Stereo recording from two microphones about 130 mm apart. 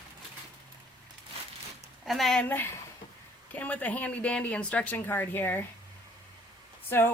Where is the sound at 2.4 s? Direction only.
15° left (ahead or behind).